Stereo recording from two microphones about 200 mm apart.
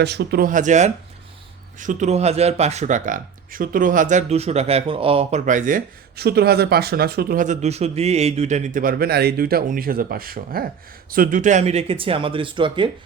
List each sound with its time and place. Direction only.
0.0 s speech: 55° right (ahead or behind); by 12.9 s 25° right (ahead or behind)